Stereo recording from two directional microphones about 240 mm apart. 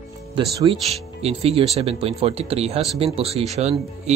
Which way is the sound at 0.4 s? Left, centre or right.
Right.